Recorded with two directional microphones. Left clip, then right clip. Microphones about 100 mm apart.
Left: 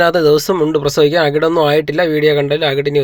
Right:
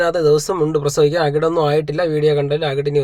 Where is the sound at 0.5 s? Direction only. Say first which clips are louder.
Left 3 dB; 30° left (ahead or behind).